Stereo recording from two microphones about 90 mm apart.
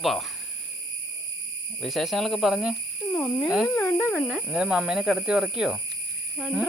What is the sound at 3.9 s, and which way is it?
Speech, 30° left (ahead or behind).